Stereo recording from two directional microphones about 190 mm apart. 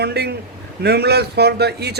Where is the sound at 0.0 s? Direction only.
60° right (ahead or behind).